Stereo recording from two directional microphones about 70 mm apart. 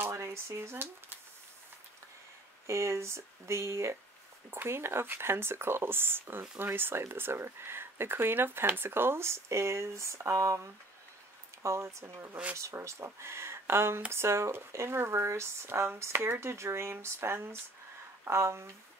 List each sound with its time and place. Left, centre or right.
0.0 s speech: right
2.6 s speech: right